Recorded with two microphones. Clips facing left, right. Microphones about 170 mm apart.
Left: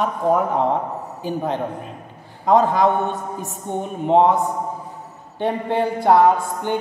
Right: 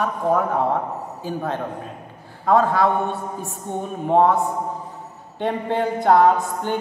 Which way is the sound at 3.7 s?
20° left (ahead or behind).